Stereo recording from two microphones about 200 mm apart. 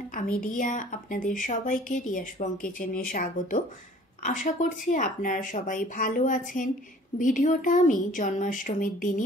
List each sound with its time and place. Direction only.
0.4 s a woman's voice: 40° left (ahead or behind)